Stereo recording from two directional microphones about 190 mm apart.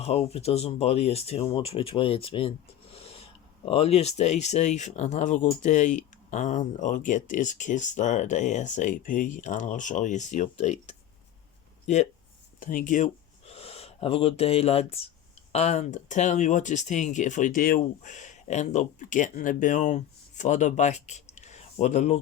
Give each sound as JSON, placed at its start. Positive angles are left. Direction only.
{"t": 0.0, "sound": "speech", "side_deg": 35}
{"t": 2.9, "sound": "owl", "side_deg": 30}
{"t": 3.7, "sound": "speech", "side_deg": 30}
{"t": 12.5, "sound": "speech", "side_deg": 45}
{"t": 13.5, "sound": "speech", "side_deg": 30}